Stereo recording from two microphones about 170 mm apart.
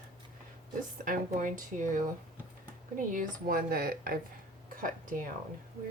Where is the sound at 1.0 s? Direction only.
50° right (ahead or behind).